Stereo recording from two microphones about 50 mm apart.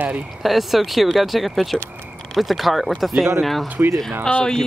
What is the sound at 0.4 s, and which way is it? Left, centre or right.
Speech, centre.